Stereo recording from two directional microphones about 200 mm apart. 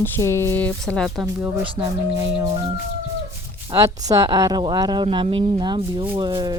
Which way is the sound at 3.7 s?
20° right (ahead or behind).